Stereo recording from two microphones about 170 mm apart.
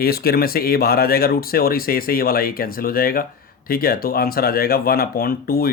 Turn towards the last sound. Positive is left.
turn(degrees=60)  # may be behind; listen again after turning